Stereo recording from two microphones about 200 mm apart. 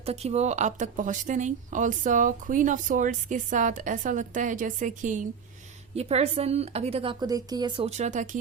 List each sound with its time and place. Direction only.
0.0 s speech: 30° right (ahead or behind)
7.9 s speech: 35° right (ahead or behind)